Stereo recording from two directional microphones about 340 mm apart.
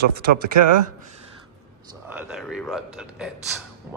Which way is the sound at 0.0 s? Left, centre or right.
Right.